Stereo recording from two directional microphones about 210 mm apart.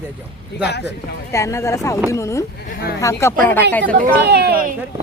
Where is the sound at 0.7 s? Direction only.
55° left (ahead or behind).